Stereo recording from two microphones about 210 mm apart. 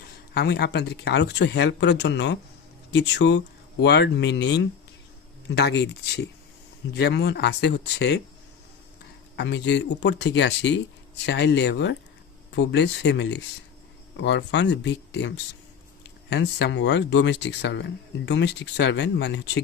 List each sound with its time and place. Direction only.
0.3 s speech: 50° left (ahead or behind)
9.3 s speech: 55° left (ahead or behind)
16.3 s speech: 55° left (ahead or behind)